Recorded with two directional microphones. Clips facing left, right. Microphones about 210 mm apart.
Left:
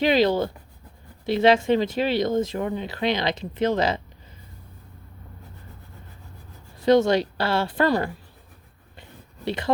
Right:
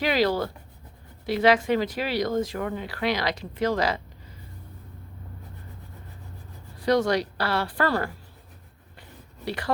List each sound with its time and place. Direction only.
0.0 s speech: 25° left (ahead or behind)
6.7 s speech: 25° left (ahead or behind)
9.0 s a sound: 25° left (ahead or behind)